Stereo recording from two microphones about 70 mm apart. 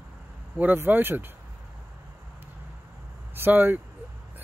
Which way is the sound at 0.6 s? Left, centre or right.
Right.